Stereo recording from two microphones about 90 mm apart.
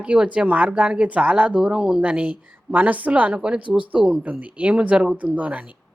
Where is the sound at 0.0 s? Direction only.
15° right (ahead or behind).